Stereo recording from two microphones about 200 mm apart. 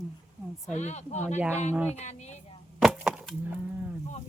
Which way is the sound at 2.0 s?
35° left (ahead or behind).